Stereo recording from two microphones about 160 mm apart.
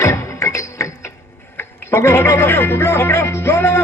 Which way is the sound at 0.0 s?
20° left (ahead or behind).